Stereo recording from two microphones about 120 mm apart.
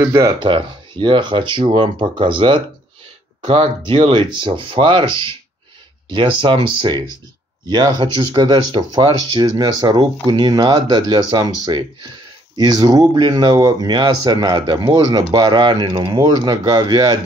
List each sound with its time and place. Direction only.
0.0 s speech: 25° right (ahead or behind)
0.4 s speech: 40° right (ahead or behind)
3.8 s speech: 40° right (ahead or behind)